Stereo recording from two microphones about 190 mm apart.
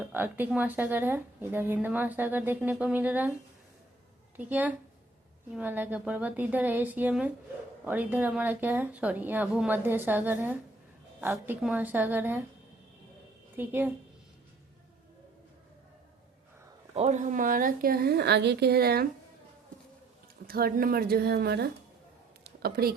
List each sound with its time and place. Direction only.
0.0 s speech: 10° right (ahead or behind)
4.4 s speech: 10° right (ahead or behind)
13.6 s speech: 10° right (ahead or behind)
16.9 s speech: 35° right (ahead or behind); by 19.0 s 55° right (ahead or behind)
20.5 s speech: 50° right (ahead or behind)
22.4 s a sound: 55° right (ahead or behind)